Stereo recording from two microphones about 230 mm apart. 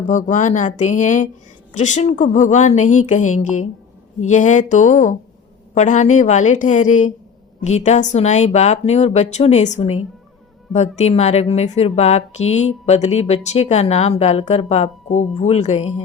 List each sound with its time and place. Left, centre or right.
0.1 s a woman's voice: left